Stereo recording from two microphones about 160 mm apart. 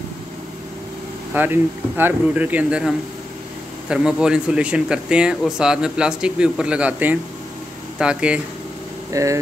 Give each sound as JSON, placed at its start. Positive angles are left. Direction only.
{"t": 1.3, "sound": "speech", "side_deg": -10}
{"t": 3.9, "sound": "speech", "side_deg": -5}
{"t": 9.1, "sound": "speech", "side_deg": -20}